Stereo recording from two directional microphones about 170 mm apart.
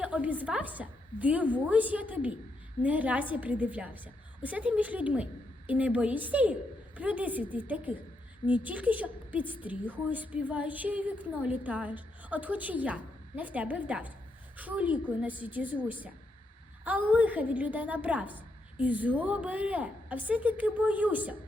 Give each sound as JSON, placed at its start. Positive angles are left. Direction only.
{"t": 0.0, "sound": "a woman's voice", "side_deg": -10}